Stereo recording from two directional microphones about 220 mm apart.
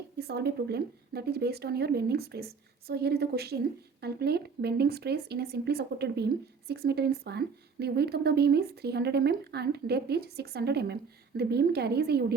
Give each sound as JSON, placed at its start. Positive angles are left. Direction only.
{"t": 0.2, "sound": "speech", "side_deg": -45}